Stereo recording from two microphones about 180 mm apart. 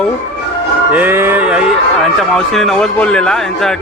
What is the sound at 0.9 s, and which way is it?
A man's voice, 10° right (ahead or behind).